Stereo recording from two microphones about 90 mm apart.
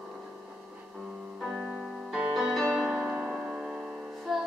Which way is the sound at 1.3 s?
5° right (ahead or behind).